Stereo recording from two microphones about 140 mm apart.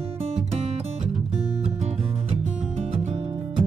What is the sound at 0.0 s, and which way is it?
Music, 50° right (ahead or behind).